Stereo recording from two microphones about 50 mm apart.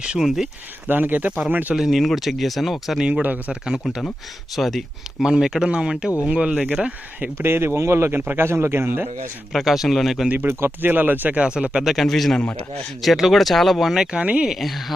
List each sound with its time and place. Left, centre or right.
0.0 s speech: centre
0.9 s speech: right
1.7 s speech: centre
3.1 s speech: right
3.7 s speech: centre
5.2 s speech: centre
6.2 s speech: right
7.3 s speech: right
9.5 s speech: centre
10.4 s speech: right
11.3 s speech: right
11.9 s speech: centre
14.0 s speech: centre
14.6 s speech: centre